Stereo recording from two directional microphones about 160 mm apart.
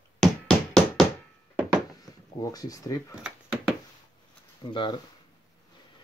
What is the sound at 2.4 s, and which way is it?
Speech, 20° left (ahead or behind).